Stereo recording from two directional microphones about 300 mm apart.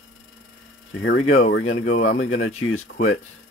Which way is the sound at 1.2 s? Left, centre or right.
Left.